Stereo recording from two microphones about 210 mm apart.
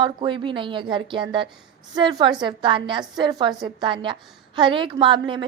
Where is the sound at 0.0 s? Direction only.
25° right (ahead or behind).